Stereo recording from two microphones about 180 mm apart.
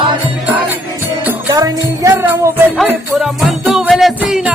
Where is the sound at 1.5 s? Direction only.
20° right (ahead or behind).